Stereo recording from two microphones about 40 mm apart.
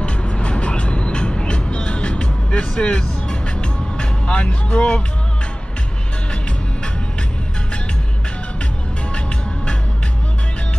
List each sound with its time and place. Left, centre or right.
0.0 s music: left